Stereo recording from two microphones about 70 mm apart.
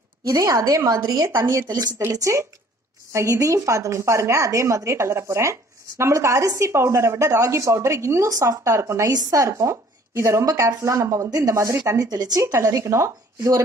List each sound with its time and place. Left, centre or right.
0.3 s speech: right
0.8 s a woman's voice: right
1.3 s speech: right
9.1 s a woman's voice: right
9.5 s speech: right
11.9 s speech: right